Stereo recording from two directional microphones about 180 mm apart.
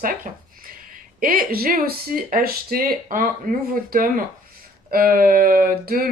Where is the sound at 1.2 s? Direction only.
50° right (ahead or behind).